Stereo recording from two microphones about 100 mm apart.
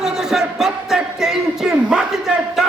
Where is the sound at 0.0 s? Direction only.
5° right (ahead or behind).